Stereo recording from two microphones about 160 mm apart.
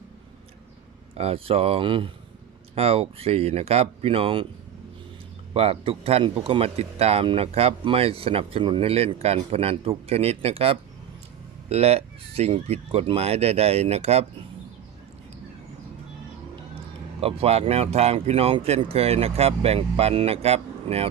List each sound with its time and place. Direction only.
1.1 s speech: 40° right (ahead or behind)
5.5 s speech: 35° right (ahead or behind)
17.2 s speech: 40° right (ahead or behind)